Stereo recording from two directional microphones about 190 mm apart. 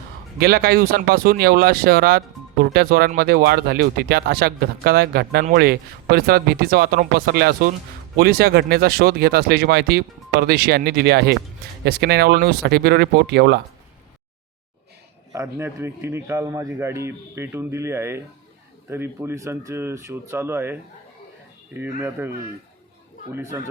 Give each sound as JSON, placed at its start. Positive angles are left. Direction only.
{"t": 0.3, "sound": "speech", "side_deg": -55}
{"t": 15.3, "sound": "a man's voice", "side_deg": -15}
{"t": 23.3, "sound": "a man's voice", "side_deg": -15}